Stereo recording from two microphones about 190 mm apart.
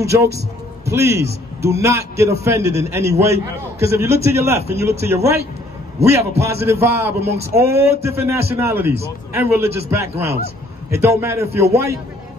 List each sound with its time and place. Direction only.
0.0 s a man's voice: 15° right (ahead or behind)
6.4 s a man's voice: 15° right (ahead or behind)